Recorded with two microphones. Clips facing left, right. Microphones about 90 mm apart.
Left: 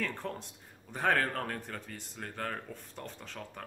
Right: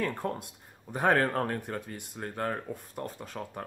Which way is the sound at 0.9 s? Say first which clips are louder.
Right 5 dB; 15° right (ahead or behind).